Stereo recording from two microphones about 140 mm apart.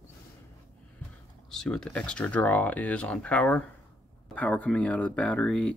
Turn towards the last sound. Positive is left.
turn(degrees=5)  # may be behind; listen again after turning